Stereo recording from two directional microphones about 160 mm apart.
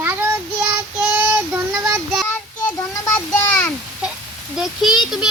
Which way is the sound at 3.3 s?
10° left (ahead or behind).